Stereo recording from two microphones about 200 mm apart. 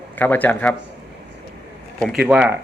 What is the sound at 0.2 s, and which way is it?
Speech, 10° left (ahead or behind).